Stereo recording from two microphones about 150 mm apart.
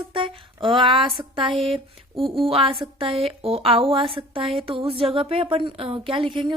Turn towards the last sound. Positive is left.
turn(degrees=-35)  # may be behind; listen again after turning